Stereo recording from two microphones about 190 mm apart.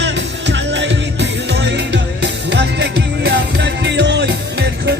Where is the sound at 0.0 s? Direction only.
65° right (ahead or behind).